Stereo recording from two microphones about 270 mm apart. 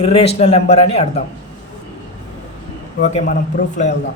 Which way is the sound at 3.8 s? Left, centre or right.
Left.